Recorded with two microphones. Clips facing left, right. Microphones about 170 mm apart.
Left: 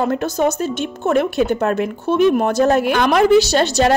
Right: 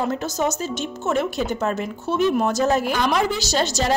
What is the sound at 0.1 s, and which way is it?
Speech, 60° left (ahead or behind).